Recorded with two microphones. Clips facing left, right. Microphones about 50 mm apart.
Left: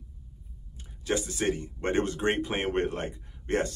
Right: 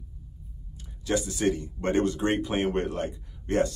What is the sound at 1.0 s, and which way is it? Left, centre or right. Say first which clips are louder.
Speech: right 2 dB; left.